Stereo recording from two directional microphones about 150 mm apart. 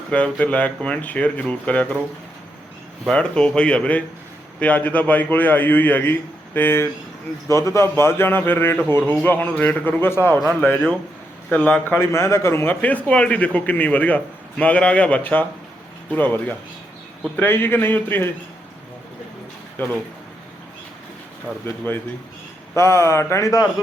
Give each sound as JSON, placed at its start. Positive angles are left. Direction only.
{"t": 0.1, "sound": "a man's voice", "side_deg": 10}
{"t": 3.1, "sound": "a man's voice", "side_deg": 5}
{"t": 19.8, "sound": "a man's voice", "side_deg": 15}
{"t": 21.7, "sound": "a man's voice", "side_deg": 15}